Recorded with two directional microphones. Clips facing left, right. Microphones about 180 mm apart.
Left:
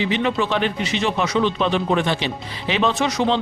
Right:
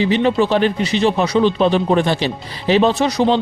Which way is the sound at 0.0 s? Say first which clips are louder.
Right 6 dB; 35° right (ahead or behind).